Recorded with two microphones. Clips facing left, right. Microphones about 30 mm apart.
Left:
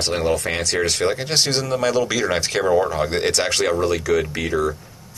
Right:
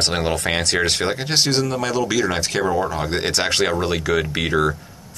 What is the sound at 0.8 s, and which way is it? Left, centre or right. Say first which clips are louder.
Speech: right 1 dB; right.